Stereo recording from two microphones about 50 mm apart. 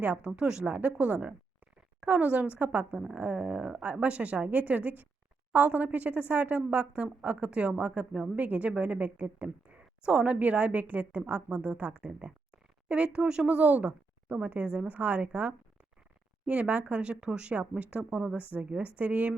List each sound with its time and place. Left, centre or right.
0.0 s speech: right
0.3 s a woman's voice: centre
0.6 s a woman's voice: right
13.6 s a woman's voice: right